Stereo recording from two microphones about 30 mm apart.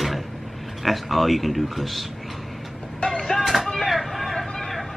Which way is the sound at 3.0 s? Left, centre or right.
Centre.